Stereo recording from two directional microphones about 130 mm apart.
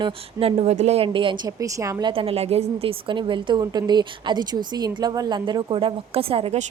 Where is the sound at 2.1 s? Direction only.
45° right (ahead or behind).